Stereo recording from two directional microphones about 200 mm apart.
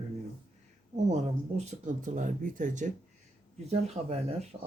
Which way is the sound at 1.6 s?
35° right (ahead or behind).